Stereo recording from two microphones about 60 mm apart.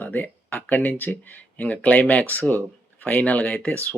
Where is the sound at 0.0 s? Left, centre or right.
Left.